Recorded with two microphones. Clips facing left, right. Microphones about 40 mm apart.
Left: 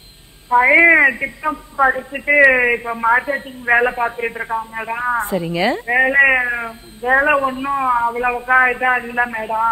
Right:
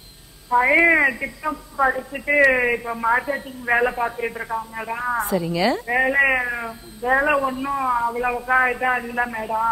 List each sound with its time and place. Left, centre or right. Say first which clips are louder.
0.5 s a man's voice: left 5 dB; left